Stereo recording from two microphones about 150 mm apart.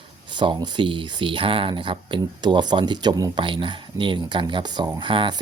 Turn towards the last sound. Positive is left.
turn(degrees=-35)  # may be behind; listen again after turning